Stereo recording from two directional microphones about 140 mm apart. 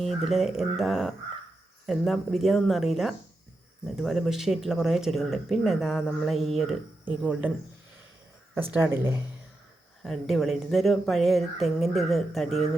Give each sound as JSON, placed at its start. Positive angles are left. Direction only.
{"t": 0.0, "sound": "speech", "side_deg": 0}
{"t": 8.7, "sound": "speech", "side_deg": -15}
{"t": 10.0, "sound": "speech", "side_deg": 0}